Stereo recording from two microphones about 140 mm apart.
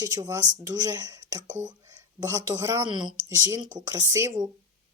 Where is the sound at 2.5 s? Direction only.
25° right (ahead or behind).